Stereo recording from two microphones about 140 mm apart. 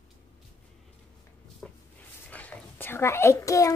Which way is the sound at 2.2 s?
10° left (ahead or behind).